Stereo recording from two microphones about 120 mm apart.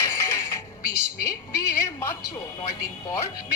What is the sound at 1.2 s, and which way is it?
A woman's voice, 25° left (ahead or behind).